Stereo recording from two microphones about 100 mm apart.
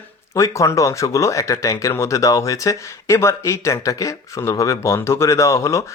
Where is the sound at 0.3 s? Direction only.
30° left (ahead or behind).